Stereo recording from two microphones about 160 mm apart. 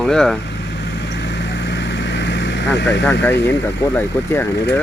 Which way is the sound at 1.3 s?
90° left.